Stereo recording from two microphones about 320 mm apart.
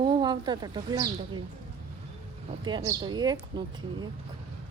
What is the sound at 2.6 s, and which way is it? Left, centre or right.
Speech, centre.